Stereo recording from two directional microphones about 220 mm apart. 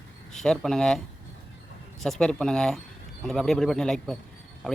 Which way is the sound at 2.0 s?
Centre (ahead or behind).